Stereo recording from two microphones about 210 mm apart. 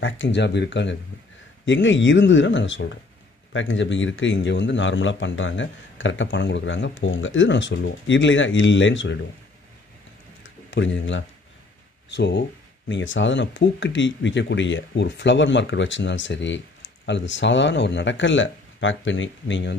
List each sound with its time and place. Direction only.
0.0 s speech: 60° left (ahead or behind)
10.4 s a sound: 60° left (ahead or behind)
12.1 s speech: 55° left (ahead or behind)